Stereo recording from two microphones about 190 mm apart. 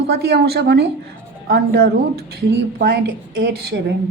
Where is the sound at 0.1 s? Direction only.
55° right (ahead or behind).